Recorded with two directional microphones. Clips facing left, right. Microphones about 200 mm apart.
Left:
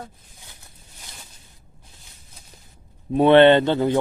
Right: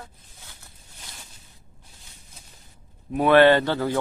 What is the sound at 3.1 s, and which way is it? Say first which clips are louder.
Speech: left 3 dB; 25° left (ahead or behind).